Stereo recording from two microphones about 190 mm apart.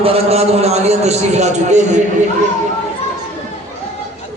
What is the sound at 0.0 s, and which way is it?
A man's voice, 30° right (ahead or behind).